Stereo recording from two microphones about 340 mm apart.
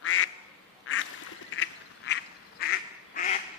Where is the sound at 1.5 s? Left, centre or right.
Left.